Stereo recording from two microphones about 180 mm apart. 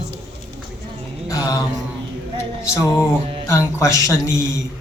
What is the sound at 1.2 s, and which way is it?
Mantra, 20° left (ahead or behind).